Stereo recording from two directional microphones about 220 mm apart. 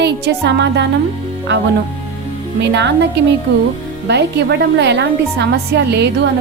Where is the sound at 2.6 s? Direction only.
50° right (ahead or behind).